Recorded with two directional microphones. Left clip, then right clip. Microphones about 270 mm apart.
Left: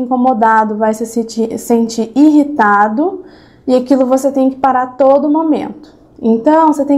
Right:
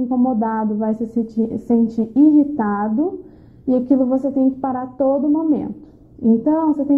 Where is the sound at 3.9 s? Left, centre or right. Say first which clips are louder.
Left 7 dB; centre.